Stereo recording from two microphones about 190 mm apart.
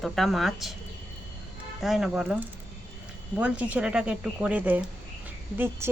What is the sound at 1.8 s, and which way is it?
Speech, centre (ahead or behind).